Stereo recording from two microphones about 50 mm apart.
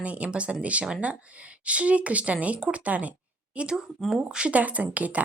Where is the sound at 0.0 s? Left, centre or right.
Right.